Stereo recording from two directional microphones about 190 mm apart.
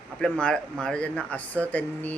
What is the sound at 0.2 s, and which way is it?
Speech, 5° left (ahead or behind).